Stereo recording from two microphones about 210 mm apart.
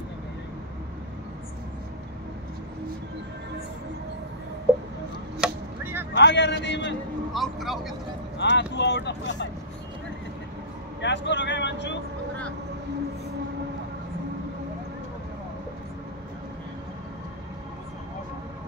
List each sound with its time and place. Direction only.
5.4 s chop: 10° right (ahead or behind)
6.1 s speech: 55° left (ahead or behind)
7.3 s speech: centre (ahead or behind)
8.4 s speech: 55° left (ahead or behind)
11.0 s speech: 55° left (ahead or behind)